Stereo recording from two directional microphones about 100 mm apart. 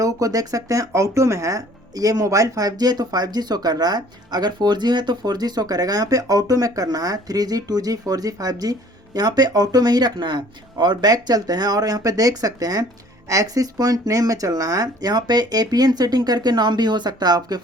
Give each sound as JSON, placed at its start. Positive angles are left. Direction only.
{"t": 0.0, "sound": "speech", "side_deg": -35}